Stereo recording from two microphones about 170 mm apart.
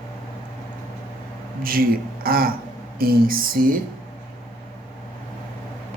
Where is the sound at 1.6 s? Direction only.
60° right (ahead or behind).